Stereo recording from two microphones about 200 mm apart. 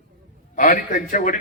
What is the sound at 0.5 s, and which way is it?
Speech, 40° left (ahead or behind).